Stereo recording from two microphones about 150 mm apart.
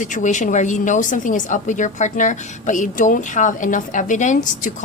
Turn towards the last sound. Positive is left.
turn(degrees=55)  # may be behind; listen again after turning